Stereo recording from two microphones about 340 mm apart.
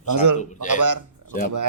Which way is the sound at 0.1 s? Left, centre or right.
Right.